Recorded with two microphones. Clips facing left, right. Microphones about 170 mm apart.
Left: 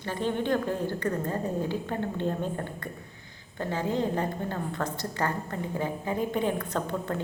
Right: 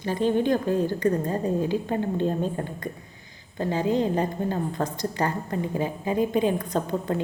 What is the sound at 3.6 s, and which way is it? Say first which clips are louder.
A woman's voice: right 5 dB; 15° right (ahead or behind).